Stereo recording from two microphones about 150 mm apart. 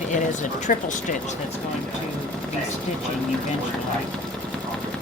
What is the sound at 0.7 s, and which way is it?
Speech, 60° left (ahead or behind).